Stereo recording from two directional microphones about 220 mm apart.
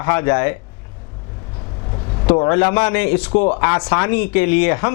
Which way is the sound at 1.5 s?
25° left (ahead or behind).